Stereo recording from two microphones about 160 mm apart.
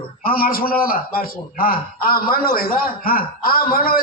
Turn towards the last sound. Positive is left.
turn(degrees=65)  # may be behind; listen again after turning